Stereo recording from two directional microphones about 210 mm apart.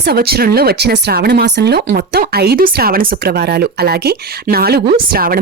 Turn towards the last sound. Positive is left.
turn(degrees=-45)  # may be behind; listen again after turning